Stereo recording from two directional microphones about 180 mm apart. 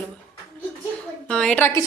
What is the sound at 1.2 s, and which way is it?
Speech, 5° left (ahead or behind).